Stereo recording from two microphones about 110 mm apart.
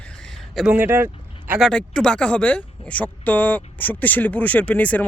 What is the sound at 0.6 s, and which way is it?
Speech, 15° right (ahead or behind).